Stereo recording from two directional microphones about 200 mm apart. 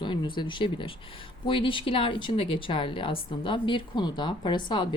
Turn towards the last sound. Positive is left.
turn(degrees=25)  # may be behind; listen again after turning